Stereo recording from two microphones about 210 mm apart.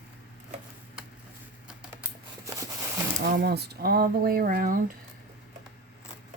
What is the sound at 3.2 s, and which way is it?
Speech, 50° right (ahead or behind).